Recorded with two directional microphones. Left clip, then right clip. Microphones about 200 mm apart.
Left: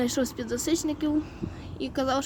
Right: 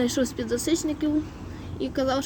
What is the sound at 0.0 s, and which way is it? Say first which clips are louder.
Speech: right 2 dB; 15° left (ahead or behind).